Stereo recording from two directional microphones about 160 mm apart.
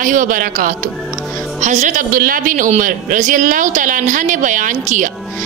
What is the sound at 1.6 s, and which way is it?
A woman's voice, 50° right (ahead or behind).